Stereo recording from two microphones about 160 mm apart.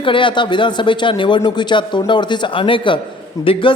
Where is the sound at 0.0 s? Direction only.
30° left (ahead or behind).